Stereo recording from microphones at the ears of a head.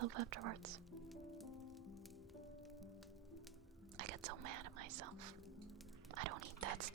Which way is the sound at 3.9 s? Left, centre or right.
Right.